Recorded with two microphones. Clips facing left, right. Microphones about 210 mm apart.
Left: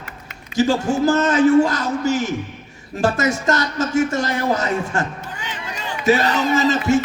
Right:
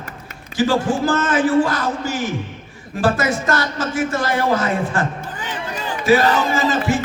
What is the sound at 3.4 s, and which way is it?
A man's voice, 20° left (ahead or behind).